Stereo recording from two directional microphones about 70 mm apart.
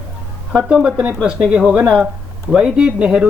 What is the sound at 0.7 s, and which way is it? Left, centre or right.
Speech, centre.